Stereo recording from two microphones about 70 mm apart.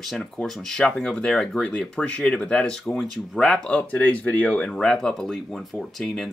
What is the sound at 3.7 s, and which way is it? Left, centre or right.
Speech, left.